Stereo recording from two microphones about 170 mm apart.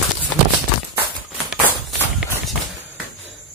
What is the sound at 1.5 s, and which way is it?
Run, centre (ahead or behind).